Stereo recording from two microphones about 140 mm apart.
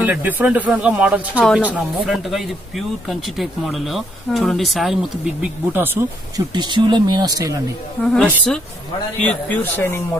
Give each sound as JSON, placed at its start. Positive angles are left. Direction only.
{"t": 0.0, "sound": "speech", "side_deg": -10}
{"t": 5.4, "sound": "speech", "side_deg": -15}
{"t": 6.3, "sound": "speech", "side_deg": -30}
{"t": 8.0, "sound": "speech", "side_deg": 5}